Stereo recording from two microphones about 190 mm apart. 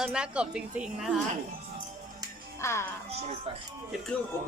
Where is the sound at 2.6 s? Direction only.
15° left (ahead or behind).